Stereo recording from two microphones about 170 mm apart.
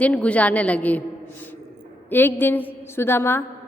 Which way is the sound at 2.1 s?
10° left (ahead or behind).